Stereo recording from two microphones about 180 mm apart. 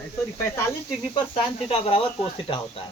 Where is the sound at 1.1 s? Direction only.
30° left (ahead or behind).